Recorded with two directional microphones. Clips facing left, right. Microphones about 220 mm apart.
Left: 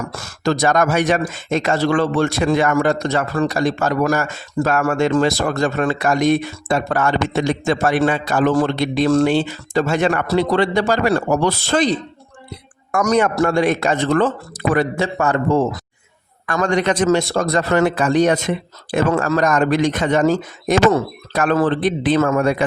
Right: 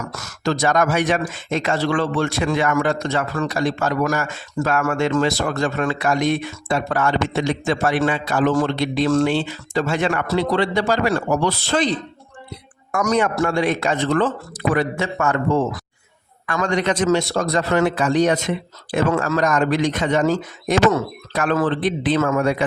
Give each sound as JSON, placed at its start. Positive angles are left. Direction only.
{"t": 0.0, "sound": "a sound", "side_deg": 30}
{"t": 0.4, "sound": "a man's voice", "side_deg": 40}
{"t": 12.9, "sound": "a man's voice", "side_deg": 45}
{"t": 16.5, "sound": "a man's voice", "side_deg": 45}
{"t": 20.9, "sound": "a man's voice", "side_deg": 35}